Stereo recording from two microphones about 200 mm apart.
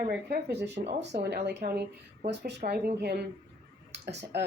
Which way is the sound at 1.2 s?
55° right (ahead or behind).